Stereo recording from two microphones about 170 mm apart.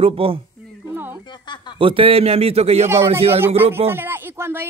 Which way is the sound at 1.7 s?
30° right (ahead or behind).